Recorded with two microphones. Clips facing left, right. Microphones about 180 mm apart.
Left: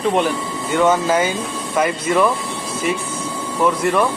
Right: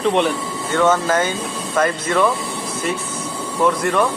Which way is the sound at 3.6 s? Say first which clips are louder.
Even; 5° left (ahead or behind).